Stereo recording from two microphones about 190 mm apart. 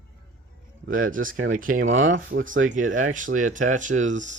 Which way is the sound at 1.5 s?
45° right (ahead or behind).